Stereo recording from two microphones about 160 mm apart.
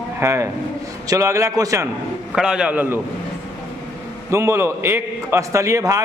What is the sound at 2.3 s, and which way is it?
Speech, 5° right (ahead or behind).